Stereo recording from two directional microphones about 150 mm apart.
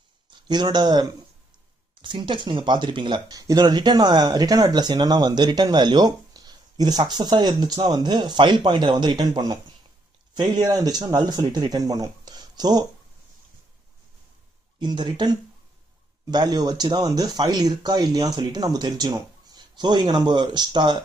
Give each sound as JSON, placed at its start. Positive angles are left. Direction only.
{"t": 0.5, "sound": "speech", "side_deg": -30}
{"t": 14.8, "sound": "speech", "side_deg": -30}